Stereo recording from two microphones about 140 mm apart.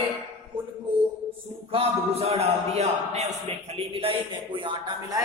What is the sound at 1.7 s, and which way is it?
Speech, 45° right (ahead or behind).